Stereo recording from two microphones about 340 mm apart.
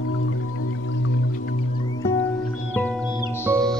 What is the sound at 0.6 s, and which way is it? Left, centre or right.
Music, left.